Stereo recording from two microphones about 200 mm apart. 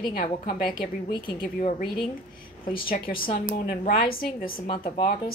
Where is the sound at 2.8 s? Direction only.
45° left (ahead or behind).